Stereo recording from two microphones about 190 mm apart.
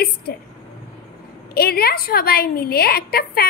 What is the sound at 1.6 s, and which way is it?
A woman's voice, 55° left (ahead or behind).